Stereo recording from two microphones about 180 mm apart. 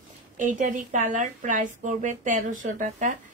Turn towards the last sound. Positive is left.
turn(degrees=-45)  # may be behind; listen again after turning